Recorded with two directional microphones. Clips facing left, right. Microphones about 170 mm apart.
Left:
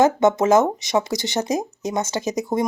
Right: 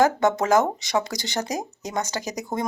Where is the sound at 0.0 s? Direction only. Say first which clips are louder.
Left 4 dB; 20° left (ahead or behind).